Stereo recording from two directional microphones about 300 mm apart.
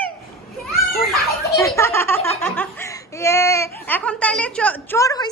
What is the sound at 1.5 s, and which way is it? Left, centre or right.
Laughter, centre.